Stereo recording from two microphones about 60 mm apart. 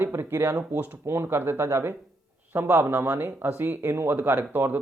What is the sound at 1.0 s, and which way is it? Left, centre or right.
Speech, right.